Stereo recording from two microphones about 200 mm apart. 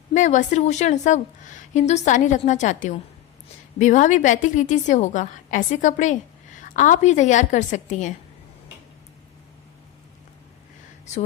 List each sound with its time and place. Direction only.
0.1 s a woman's voice: 40° left (ahead or behind)